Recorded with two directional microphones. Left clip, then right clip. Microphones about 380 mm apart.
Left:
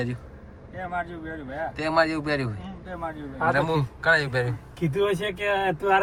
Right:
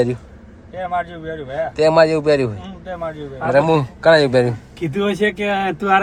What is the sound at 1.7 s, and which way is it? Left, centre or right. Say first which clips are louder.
Speech: right 11 dB; centre.